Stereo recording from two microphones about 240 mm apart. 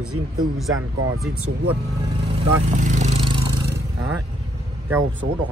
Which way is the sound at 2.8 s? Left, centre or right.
Right.